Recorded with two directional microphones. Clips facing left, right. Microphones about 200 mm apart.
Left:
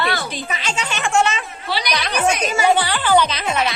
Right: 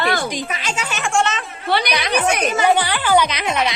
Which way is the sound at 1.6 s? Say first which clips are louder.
Right 5 dB; 55° right (ahead or behind).